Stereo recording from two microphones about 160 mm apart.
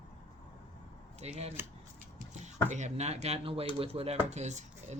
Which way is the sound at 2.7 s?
45° right (ahead or behind).